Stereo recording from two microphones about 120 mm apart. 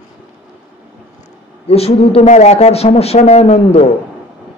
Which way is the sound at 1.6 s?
55° left (ahead or behind).